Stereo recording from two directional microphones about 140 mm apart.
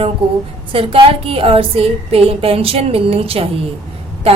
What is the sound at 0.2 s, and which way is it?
A woman's voice, 40° right (ahead or behind).